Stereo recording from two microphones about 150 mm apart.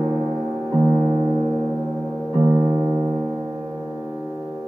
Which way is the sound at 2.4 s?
20° right (ahead or behind).